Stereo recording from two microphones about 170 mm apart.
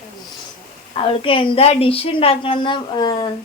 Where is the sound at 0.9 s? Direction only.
30° left (ahead or behind).